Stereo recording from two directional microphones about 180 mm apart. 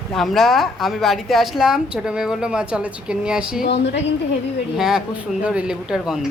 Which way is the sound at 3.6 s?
75° left (ahead or behind).